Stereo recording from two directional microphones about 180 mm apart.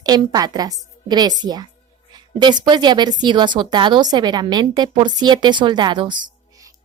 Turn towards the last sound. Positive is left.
turn(degrees=-25)  # may be behind; listen again after turning